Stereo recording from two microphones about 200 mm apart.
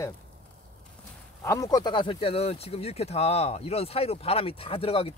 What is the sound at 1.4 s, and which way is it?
Speech, 15° left (ahead or behind).